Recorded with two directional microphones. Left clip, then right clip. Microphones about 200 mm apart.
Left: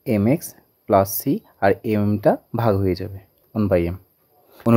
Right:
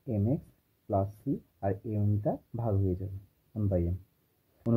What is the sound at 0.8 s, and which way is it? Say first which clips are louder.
Speech: left 15 dB; 75° left (ahead or behind).